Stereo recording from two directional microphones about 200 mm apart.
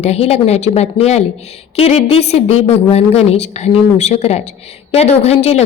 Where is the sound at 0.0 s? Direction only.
30° left (ahead or behind).